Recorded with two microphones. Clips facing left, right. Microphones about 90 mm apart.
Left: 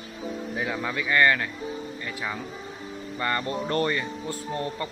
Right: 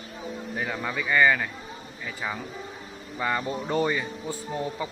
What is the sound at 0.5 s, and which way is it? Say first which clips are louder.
Speech: even; centre (ahead or behind).